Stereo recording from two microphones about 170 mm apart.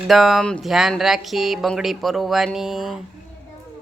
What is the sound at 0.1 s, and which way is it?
Speech, centre (ahead or behind).